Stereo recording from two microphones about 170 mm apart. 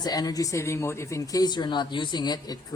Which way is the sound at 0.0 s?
20° left (ahead or behind).